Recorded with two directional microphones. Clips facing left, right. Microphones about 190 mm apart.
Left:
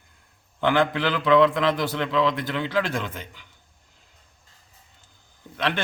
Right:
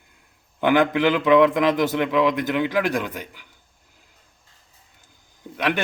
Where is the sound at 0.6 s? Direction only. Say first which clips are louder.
Right 4 dB; 15° right (ahead or behind).